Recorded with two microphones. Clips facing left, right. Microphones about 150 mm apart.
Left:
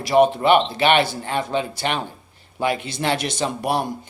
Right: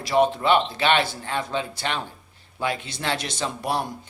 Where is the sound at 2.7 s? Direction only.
60° left (ahead or behind).